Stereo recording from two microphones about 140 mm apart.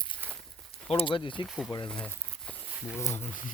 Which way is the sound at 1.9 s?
5° left (ahead or behind).